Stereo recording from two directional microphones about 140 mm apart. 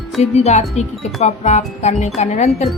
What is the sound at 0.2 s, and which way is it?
A woman's voice, 50° left (ahead or behind).